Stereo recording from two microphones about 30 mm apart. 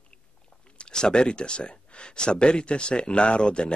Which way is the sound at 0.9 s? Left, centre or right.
Left.